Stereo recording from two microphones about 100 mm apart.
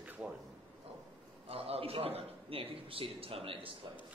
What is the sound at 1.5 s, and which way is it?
A man's voice, 70° right (ahead or behind).